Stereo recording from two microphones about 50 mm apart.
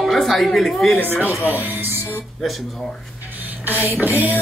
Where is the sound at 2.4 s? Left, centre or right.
Centre.